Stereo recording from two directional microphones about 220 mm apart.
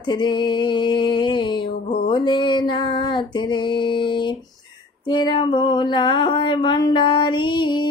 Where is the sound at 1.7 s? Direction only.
50° left (ahead or behind).